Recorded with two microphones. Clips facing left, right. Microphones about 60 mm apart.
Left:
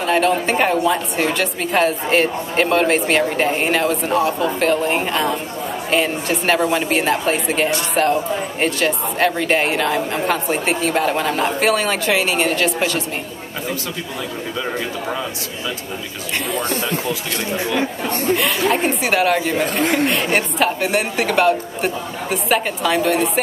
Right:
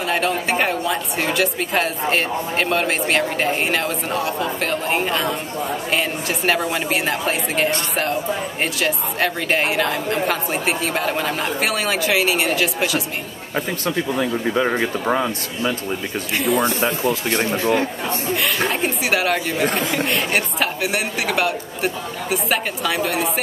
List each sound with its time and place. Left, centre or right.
0.0 s a woman's voice: centre
14.5 s speech: right
17.0 s speech: right
18.7 s a woman's voice: centre
19.8 s speech: left
20.3 s a woman's voice: centre